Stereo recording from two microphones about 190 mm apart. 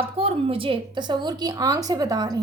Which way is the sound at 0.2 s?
30° right (ahead or behind).